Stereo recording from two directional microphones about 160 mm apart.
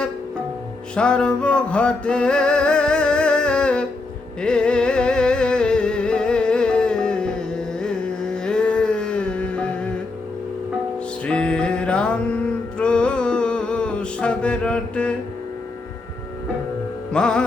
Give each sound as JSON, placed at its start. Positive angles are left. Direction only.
{"t": 0.9, "sound": "music", "side_deg": 5}
{"t": 11.3, "sound": "music", "side_deg": 5}
{"t": 17.1, "sound": "music", "side_deg": 5}